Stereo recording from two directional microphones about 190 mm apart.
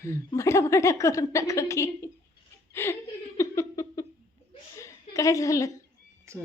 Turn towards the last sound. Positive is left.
turn(degrees=-15)  # may be behind; listen again after turning